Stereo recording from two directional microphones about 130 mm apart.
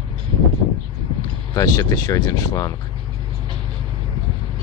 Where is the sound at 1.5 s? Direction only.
25° left (ahead or behind).